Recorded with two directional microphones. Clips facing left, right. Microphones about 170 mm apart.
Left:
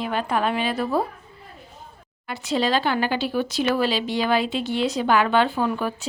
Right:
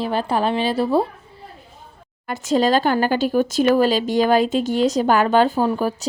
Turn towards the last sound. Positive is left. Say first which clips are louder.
# right 4 dB
turn(degrees=-35)  # may be behind; listen again after turning